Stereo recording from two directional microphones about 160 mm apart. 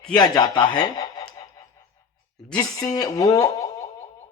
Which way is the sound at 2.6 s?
20° left (ahead or behind).